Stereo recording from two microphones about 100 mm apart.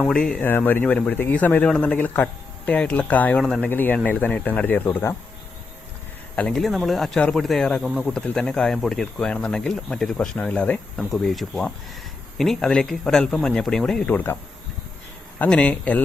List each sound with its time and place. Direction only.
0.0 s speech: 5° left (ahead or behind)
0.4 s speech: 20° left (ahead or behind)
3.4 s speech: 5° left (ahead or behind)
3.7 s speech: 20° left (ahead or behind)
6.3 s speech: 10° left (ahead or behind)
10.9 s speech: centre (ahead or behind)
15.4 s speech: 15° left (ahead or behind)